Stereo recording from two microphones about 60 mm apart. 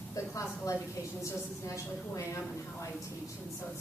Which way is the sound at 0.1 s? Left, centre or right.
Left.